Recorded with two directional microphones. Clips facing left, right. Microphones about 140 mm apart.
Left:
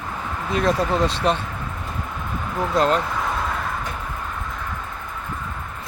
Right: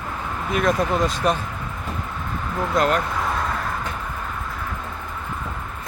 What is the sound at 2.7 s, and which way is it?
Speech, 30° left (ahead or behind).